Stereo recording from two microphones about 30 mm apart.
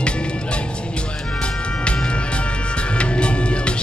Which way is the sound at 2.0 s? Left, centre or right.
Left.